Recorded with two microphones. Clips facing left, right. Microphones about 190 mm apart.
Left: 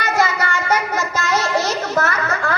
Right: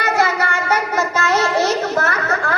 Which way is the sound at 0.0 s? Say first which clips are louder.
Right 1 dB; 60° right (ahead or behind).